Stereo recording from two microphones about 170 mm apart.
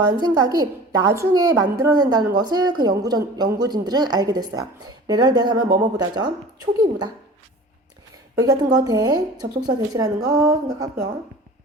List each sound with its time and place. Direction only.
0.2 s a woman's voice: 20° right (ahead or behind)
8.4 s a woman's voice: 20° right (ahead or behind)